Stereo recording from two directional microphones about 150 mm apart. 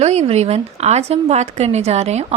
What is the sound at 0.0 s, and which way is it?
A woman's voice, 45° right (ahead or behind).